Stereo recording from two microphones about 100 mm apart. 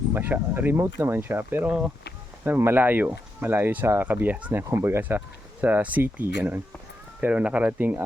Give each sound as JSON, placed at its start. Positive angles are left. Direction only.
{"t": 0.1, "sound": "speech", "side_deg": -20}